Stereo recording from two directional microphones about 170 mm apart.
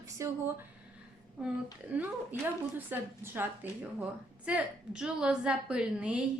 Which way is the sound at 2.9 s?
10° right (ahead or behind).